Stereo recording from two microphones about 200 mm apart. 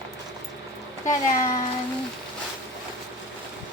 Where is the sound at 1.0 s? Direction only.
15° left (ahead or behind).